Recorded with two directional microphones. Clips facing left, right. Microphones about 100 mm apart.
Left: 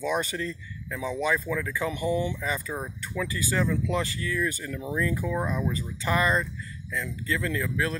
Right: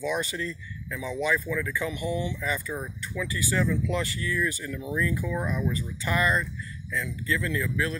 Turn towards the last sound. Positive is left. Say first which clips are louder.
# even
turn(degrees=35)  # may be behind; listen again after turning